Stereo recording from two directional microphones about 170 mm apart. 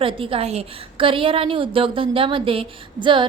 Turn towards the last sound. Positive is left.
turn(degrees=-30)  # may be behind; listen again after turning